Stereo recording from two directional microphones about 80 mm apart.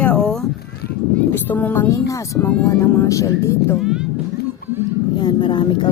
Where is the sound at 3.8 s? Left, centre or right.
Centre.